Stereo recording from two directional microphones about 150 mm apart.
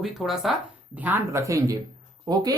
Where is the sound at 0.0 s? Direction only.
Centre (ahead or behind).